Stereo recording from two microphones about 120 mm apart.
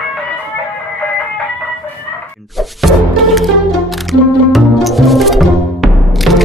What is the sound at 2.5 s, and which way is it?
Music, centre (ahead or behind).